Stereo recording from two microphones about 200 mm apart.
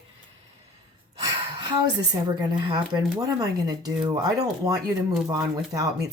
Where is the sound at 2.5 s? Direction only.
20° right (ahead or behind).